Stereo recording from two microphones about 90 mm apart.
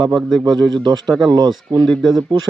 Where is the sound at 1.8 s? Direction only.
Centre (ahead or behind).